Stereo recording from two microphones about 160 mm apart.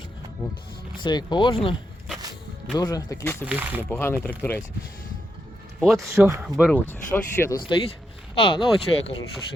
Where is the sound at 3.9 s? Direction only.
15° left (ahead or behind).